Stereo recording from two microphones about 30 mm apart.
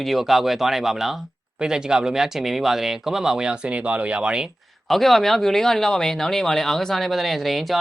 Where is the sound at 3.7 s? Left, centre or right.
Right.